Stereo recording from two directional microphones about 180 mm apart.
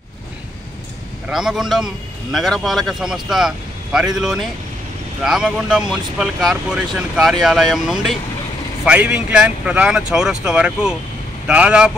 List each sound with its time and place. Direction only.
1.3 s speech: 5° right (ahead or behind)